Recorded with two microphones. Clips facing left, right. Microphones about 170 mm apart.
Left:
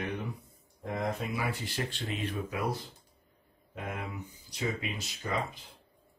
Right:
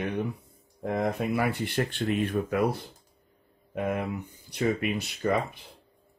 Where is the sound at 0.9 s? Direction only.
60° right (ahead or behind).